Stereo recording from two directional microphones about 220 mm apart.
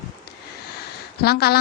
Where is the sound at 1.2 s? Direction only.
45° left (ahead or behind).